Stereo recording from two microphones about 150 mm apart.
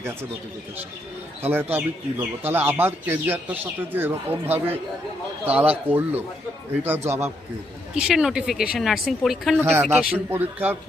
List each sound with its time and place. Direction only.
1.4 s speech: 15° right (ahead or behind)
7.9 s speech: 5° right (ahead or behind)
9.6 s speech: 15° right (ahead or behind)